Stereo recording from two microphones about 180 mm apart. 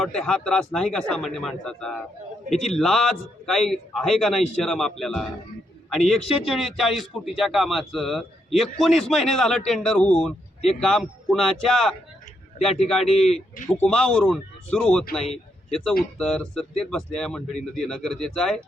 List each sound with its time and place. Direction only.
0.0 s a man's voice: centre (ahead or behind)
6.1 s speech: 35° left (ahead or behind)
6.4 s a man's voice: centre (ahead or behind)
16.1 s a man's voice: 5° left (ahead or behind)